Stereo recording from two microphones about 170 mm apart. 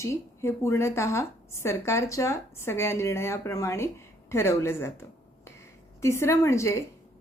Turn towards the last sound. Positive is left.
turn(degrees=15)  # may be behind; listen again after turning